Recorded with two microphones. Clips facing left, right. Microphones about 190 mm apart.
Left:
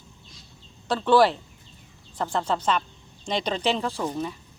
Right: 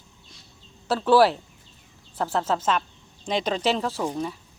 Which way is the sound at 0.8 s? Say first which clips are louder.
Right 1 dB; 5° right (ahead or behind).